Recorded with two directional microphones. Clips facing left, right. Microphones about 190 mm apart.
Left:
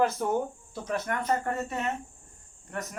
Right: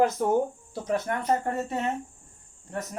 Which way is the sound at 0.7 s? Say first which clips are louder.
Right 3 dB; 25° right (ahead or behind).